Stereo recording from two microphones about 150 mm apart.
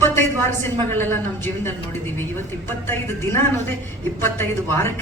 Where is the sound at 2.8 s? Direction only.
15° left (ahead or behind).